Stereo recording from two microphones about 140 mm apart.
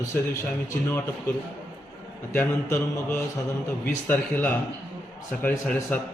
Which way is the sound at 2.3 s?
15° left (ahead or behind).